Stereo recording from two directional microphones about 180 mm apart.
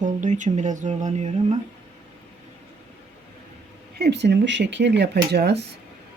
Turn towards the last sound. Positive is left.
turn(degrees=-65)  # may be behind; listen again after turning